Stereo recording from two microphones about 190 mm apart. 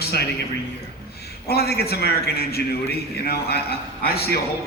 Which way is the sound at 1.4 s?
55° left (ahead or behind).